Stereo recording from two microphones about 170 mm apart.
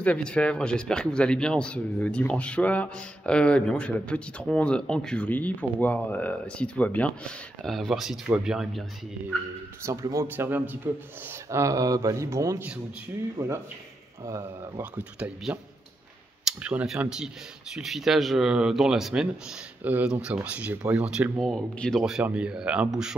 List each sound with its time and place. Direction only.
0.0 s speech: 5° left (ahead or behind)
9.8 s a man's voice: 15° right (ahead or behind)